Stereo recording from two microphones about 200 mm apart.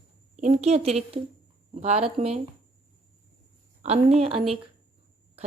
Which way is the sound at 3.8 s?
30° right (ahead or behind).